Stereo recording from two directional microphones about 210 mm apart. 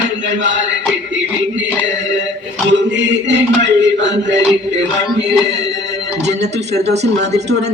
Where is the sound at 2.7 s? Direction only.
60° right (ahead or behind).